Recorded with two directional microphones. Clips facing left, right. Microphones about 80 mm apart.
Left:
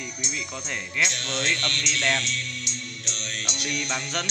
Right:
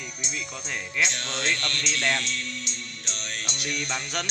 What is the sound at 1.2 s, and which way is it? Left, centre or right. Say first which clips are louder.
Music: left 1 dB; right.